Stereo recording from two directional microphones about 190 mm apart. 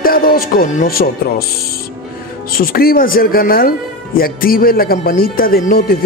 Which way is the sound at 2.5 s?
50° left (ahead or behind).